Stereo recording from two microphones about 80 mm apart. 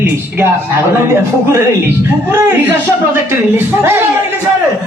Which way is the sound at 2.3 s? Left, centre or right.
Right.